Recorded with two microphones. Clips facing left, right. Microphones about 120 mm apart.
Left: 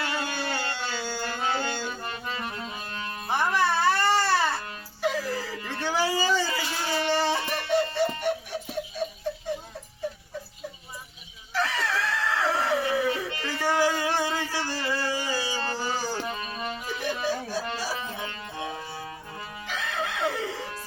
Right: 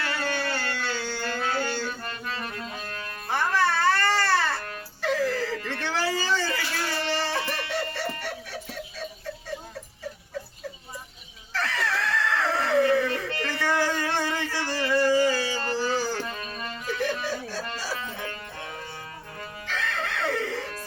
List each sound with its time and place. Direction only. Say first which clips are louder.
0.0 s music: right 1 dB; 15° left (ahead or behind)
11.5 s screaming: left 1 dB; 15° left (ahead or behind)
18.5 s music: left 3 dB; 20° left (ahead or behind)